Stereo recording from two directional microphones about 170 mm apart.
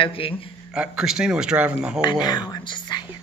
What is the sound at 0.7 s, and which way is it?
A man's voice, 5° right (ahead or behind).